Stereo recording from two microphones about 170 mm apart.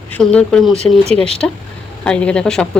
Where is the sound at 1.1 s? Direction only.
35° right (ahead or behind).